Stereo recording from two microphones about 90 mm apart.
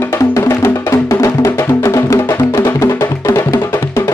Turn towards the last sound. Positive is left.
turn(degrees=30)  # may be behind; listen again after turning